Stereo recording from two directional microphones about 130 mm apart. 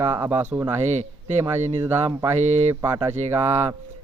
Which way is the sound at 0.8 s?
60° right (ahead or behind).